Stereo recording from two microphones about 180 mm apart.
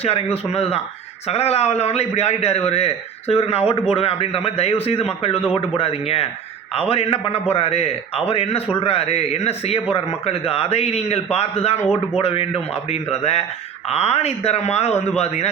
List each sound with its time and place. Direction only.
0.0 s a man's voice: 35° left (ahead or behind)